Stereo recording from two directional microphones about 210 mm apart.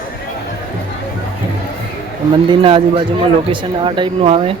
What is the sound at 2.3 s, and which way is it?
Speech, 25° right (ahead or behind).